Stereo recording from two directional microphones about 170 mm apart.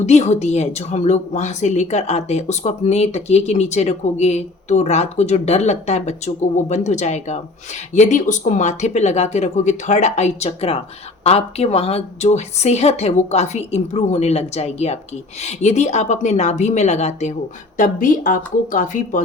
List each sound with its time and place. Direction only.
0.0 s a woman's voice: 40° left (ahead or behind)